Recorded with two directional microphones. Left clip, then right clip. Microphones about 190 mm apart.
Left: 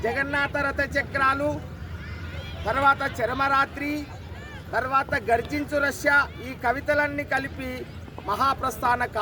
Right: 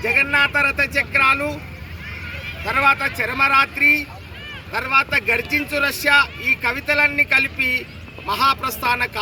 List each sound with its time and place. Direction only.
0.3 s speech: 30° right (ahead or behind)
1.2 s a man's voice: 10° right (ahead or behind)
2.6 s a man's voice: 10° right (ahead or behind)